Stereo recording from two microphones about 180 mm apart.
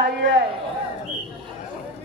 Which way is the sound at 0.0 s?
80° right.